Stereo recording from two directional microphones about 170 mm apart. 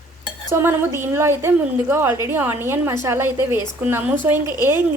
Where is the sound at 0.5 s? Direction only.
15° right (ahead or behind).